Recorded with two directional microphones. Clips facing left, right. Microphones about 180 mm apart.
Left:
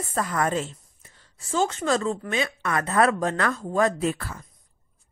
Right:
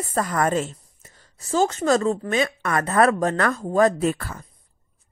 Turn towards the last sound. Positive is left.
turn(degrees=-50)  # may be behind; listen again after turning